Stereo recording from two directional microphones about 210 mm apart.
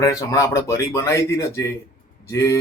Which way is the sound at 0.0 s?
15° left (ahead or behind).